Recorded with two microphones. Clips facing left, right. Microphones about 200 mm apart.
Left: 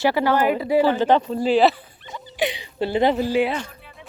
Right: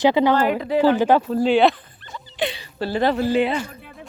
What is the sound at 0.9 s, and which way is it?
Speech, 10° right (ahead or behind).